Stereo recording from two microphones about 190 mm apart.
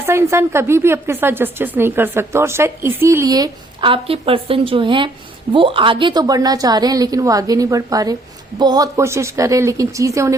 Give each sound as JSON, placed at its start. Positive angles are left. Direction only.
{"t": 0.0, "sound": "a woman's voice", "side_deg": -15}